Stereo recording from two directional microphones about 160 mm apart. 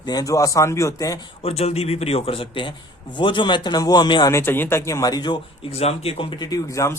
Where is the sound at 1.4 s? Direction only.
40° left (ahead or behind).